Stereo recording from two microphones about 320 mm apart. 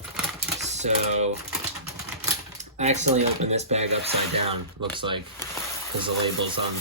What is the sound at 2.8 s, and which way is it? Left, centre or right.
Speech, right.